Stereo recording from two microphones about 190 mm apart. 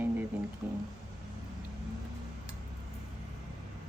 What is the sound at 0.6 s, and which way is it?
Speech, 5° right (ahead or behind).